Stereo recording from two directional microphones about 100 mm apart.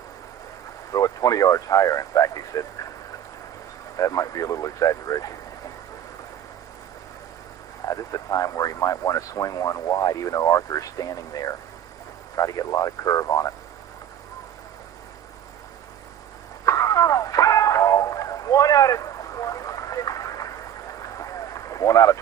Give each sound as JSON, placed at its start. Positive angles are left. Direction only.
{"t": 0.9, "sound": "speech", "side_deg": 35}
{"t": 3.9, "sound": "speech", "side_deg": 35}
{"t": 7.9, "sound": "speech", "side_deg": 35}
{"t": 16.6, "sound": "a sound", "side_deg": 35}